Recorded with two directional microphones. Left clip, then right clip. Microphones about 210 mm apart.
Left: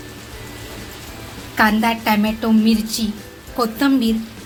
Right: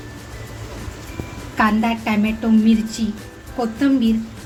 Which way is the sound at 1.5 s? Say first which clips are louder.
Left 2 dB; 25° left (ahead or behind).